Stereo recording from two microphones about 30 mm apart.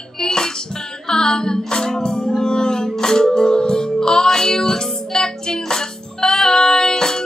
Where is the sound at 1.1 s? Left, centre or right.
Left.